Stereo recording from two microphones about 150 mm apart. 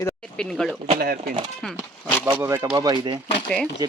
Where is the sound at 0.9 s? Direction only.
75° right (ahead or behind).